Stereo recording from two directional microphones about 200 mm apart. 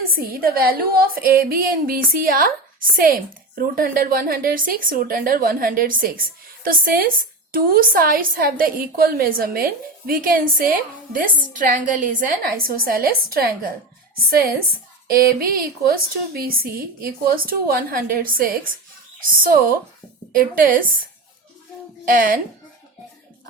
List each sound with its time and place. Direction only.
0.1 s a woman's voice: 45° right (ahead or behind)
22.0 s a woman's voice: 45° right (ahead or behind)